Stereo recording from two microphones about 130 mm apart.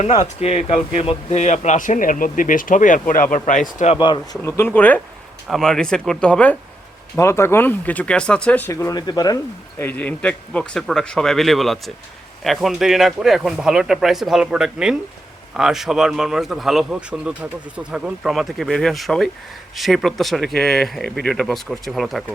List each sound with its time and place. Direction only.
0.0 s speech: 50° left (ahead or behind); by 3.9 s 75° left (ahead or behind)
3.9 s speech: 35° left (ahead or behind)
4.4 s speech: 20° left (ahead or behind)
7.2 s speech: 20° left (ahead or behind)
8.7 s speech: 25° left (ahead or behind)
9.7 s speech: 15° left (ahead or behind)